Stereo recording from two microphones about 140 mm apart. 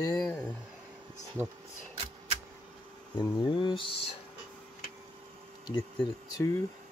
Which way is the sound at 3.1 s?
35° left (ahead or behind).